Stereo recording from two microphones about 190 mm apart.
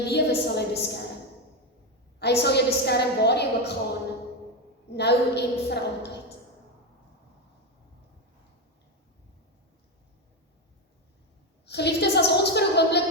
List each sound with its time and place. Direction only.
0.1 s a woman's voice: 60° left (ahead or behind)
2.1 s a woman's voice: 60° left (ahead or behind)
4.9 s a woman's voice: 60° left (ahead or behind)
11.6 s a sound: 60° left (ahead or behind)